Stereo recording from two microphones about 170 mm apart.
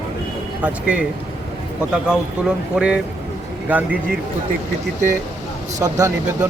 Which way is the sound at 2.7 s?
5° right (ahead or behind).